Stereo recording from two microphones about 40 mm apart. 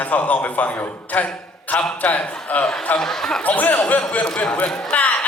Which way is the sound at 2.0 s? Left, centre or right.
Left.